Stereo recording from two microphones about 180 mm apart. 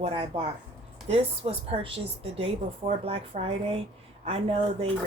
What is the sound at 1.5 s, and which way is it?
A woman's voice, 30° right (ahead or behind).